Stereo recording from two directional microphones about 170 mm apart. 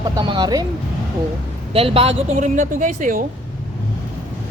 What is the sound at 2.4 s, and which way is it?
Speech, 50° right (ahead or behind).